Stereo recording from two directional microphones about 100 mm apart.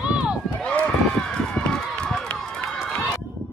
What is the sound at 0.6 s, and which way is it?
Run, 15° left (ahead or behind).